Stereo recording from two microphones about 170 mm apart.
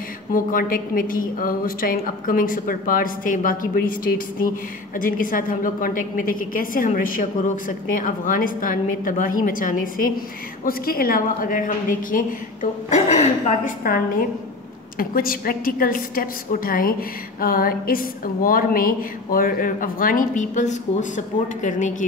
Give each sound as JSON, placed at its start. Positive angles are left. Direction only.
{"t": 0.3, "sound": "a woman's voice", "side_deg": 55}
{"t": 13.9, "sound": "a woman's voice", "side_deg": 60}